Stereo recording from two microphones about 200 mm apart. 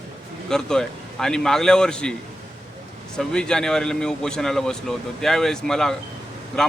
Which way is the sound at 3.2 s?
5° left (ahead or behind).